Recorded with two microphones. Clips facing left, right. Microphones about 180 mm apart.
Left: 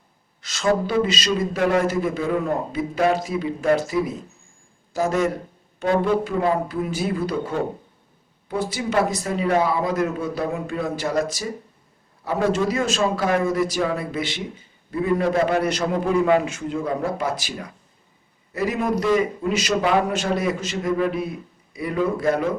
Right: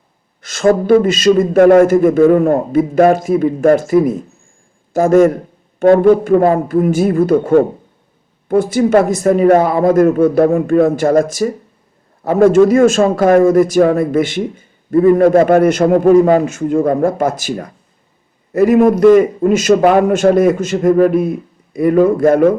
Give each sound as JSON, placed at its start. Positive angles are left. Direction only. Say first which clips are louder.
{"t": 0.4, "sound": "a man's voice", "louder": "right 10 dB", "side_deg": -50}